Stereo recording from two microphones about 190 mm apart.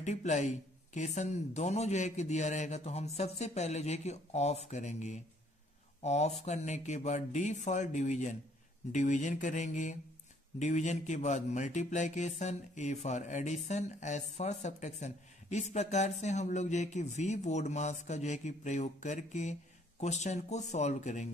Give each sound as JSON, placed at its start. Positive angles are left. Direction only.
{"t": 0.0, "sound": "speech", "side_deg": 40}